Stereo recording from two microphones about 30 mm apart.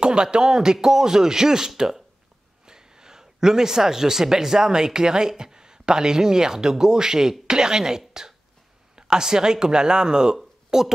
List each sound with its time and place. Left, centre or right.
0.0 s speech: right
8.1 s a sound: centre
8.9 s speech: right